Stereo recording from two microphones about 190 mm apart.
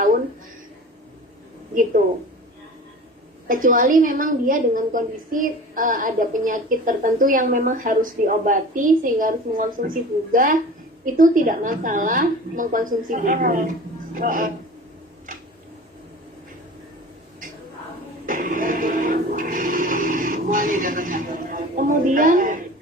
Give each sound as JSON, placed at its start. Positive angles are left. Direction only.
{"t": 1.7, "sound": "speech", "side_deg": -45}
{"t": 3.5, "sound": "a woman's voice", "side_deg": -45}
{"t": 18.3, "sound": "music", "side_deg": -45}